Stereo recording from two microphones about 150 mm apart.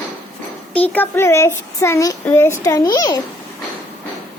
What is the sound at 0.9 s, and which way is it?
A child's voice, 15° left (ahead or behind).